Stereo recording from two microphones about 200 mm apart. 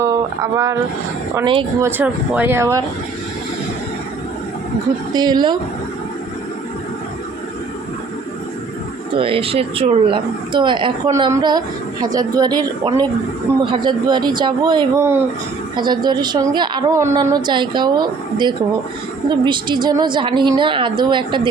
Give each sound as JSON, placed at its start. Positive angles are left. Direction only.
{"t": 0.0, "sound": "speech", "side_deg": -15}
{"t": 1.8, "sound": "speech", "side_deg": -10}
{"t": 5.1, "sound": "speech", "side_deg": -20}
{"t": 9.1, "sound": "speech", "side_deg": -25}